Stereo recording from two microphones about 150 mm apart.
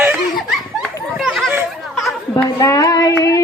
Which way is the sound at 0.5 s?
Centre (ahead or behind).